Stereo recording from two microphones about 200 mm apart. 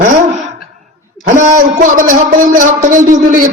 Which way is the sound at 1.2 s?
40° right (ahead or behind).